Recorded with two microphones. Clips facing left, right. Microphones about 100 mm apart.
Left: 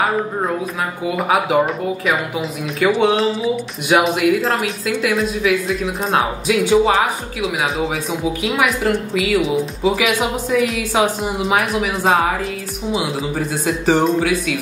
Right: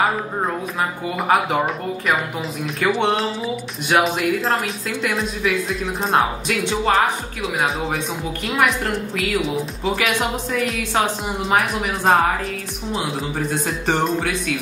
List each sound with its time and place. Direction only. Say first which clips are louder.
1.0 s a woman's voice: left 2 dB; centre (ahead or behind)
2.8 s a woman's voice: left 4 dB; centre (ahead or behind)
13.4 s a woman's voice: left 3 dB; centre (ahead or behind)